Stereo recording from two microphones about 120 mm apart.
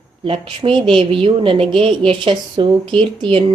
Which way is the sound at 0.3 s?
45° right (ahead or behind).